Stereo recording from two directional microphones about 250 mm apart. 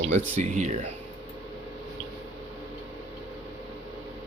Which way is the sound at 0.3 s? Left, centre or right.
Right.